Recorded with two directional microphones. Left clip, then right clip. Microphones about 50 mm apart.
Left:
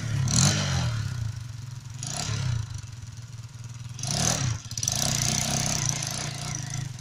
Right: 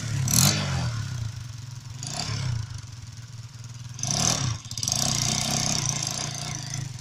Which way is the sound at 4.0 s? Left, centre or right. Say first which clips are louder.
Right 2 dB; left.